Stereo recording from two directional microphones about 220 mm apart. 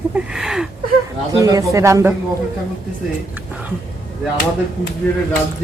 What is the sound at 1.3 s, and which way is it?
Speech, 15° right (ahead or behind).